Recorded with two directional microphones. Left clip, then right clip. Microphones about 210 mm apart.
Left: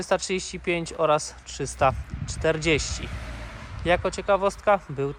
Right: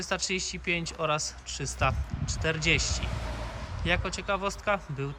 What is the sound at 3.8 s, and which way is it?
Speech, centre (ahead or behind).